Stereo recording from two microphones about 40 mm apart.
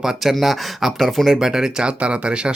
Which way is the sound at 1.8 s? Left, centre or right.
Right.